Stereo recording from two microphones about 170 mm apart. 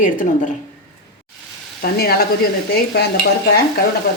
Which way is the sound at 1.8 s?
65° left (ahead or behind).